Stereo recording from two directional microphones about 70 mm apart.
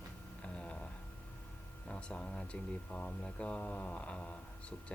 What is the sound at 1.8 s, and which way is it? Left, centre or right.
Speech, centre.